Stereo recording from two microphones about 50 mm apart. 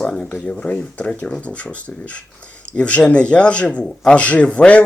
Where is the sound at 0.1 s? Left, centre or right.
Centre.